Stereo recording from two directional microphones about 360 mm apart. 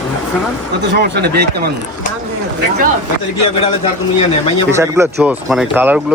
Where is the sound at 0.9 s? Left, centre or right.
Right.